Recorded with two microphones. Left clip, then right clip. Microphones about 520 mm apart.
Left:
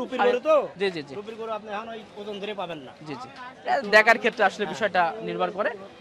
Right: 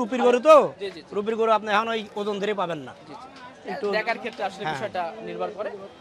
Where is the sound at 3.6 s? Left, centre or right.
Left.